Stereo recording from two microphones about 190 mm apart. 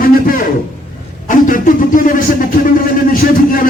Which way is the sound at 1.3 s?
45° left (ahead or behind).